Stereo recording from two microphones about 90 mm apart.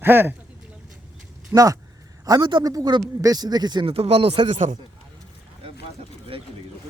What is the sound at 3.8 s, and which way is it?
Speech, 90° right.